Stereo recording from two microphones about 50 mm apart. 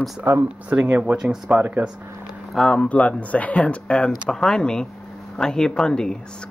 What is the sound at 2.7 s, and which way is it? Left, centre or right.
Speech, left.